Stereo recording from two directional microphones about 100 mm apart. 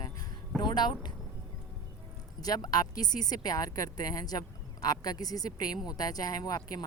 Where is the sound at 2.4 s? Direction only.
40° left (ahead or behind).